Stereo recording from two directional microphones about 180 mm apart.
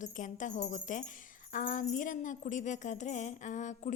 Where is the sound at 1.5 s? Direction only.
45° left (ahead or behind).